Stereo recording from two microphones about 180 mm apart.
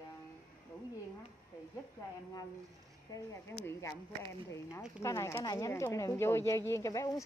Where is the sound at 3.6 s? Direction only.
15° left (ahead or behind).